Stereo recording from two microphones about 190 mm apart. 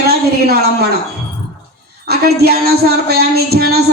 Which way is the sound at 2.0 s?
55° right (ahead or behind).